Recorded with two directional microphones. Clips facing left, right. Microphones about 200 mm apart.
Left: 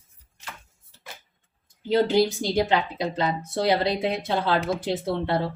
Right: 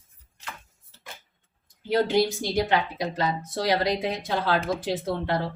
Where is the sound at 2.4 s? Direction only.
25° left (ahead or behind).